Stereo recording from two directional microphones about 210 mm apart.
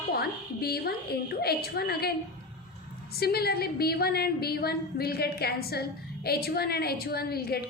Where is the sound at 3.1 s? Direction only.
50° left (ahead or behind).